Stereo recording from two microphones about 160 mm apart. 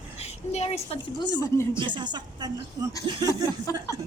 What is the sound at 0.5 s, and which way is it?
Speech, 40° left (ahead or behind).